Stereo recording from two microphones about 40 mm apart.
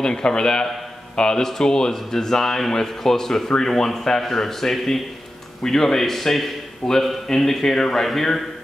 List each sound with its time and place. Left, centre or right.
0.0 s speech: left